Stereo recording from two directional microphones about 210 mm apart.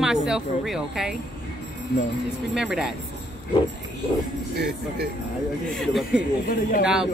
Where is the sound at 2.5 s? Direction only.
5° right (ahead or behind).